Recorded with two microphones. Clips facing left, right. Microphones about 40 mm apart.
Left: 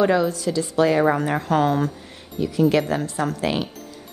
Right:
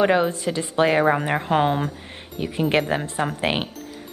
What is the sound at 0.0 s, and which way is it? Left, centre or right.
A woman's voice, right.